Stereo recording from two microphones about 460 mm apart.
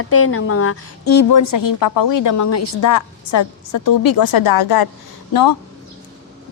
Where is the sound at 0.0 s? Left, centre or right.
Left.